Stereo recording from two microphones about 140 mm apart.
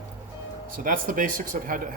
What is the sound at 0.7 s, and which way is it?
Speech, 80° right.